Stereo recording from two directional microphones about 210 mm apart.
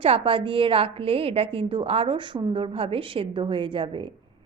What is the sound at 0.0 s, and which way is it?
A woman's voice, 25° right (ahead or behind).